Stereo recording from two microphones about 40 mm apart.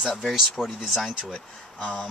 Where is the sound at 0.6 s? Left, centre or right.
Left.